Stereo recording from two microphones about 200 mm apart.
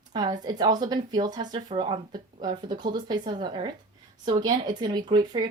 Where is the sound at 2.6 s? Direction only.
20° right (ahead or behind).